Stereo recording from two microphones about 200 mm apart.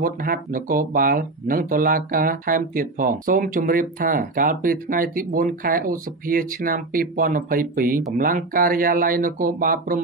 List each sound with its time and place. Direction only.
0.0 s speech: 45° right (ahead or behind)